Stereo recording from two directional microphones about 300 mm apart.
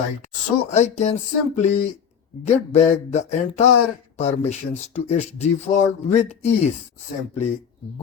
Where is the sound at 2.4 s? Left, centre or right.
Left.